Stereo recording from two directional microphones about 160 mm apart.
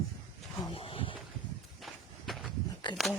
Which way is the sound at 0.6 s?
35° left (ahead or behind).